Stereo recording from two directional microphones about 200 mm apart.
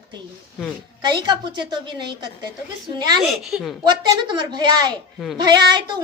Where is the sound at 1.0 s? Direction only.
20° right (ahead or behind).